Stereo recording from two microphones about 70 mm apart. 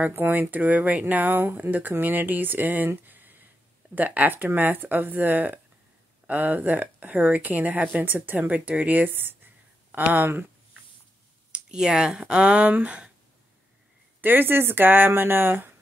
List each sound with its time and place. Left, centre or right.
0.0 s speech: right
2.9 s a sound: right
3.9 s speech: right
11.5 s speech: centre
14.2 s speech: right